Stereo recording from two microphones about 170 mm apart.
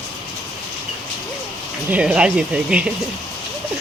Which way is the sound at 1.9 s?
5° right (ahead or behind).